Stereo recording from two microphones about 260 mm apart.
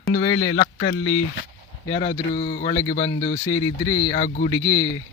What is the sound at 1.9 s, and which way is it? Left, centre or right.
Speech, centre.